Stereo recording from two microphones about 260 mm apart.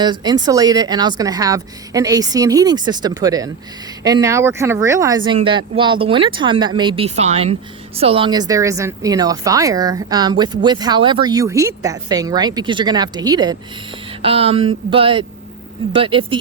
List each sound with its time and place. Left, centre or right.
0.0 s a woman's voice: centre